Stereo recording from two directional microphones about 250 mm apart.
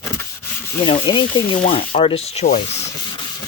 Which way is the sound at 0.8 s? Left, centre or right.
Centre.